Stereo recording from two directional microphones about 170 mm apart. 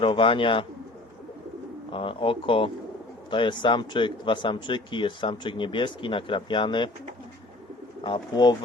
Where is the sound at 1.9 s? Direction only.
30° left (ahead or behind).